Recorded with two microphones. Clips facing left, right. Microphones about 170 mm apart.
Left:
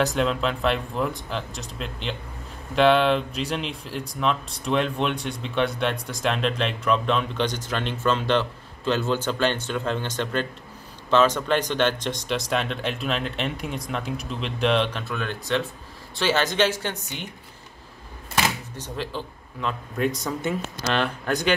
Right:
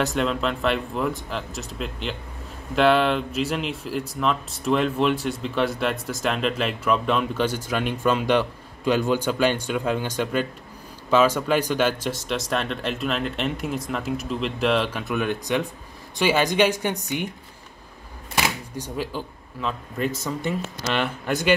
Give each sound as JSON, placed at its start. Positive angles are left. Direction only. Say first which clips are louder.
{"t": 0.0, "sound": "speech", "louder": "even", "side_deg": 0}
{"t": 15.0, "sound": "speech", "louder": "right 4 dB", "side_deg": -15}
{"t": 18.8, "sound": "speech", "louder": "right 4 dB", "side_deg": -10}